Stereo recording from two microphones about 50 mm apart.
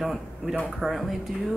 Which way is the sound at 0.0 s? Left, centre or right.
Centre.